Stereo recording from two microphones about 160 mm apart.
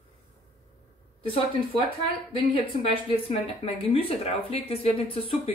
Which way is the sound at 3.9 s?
35° left (ahead or behind).